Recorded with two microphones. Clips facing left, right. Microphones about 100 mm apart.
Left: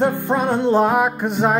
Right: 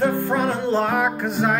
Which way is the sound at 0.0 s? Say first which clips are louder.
Left 2 dB; 20° left (ahead or behind).